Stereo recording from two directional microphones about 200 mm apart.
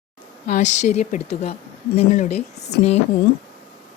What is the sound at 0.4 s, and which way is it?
Speech, 35° left (ahead or behind).